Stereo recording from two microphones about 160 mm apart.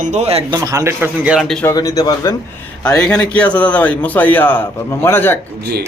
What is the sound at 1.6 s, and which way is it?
Speech, 20° left (ahead or behind).